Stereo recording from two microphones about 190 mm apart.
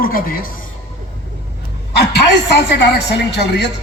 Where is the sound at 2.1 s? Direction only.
60° left (ahead or behind).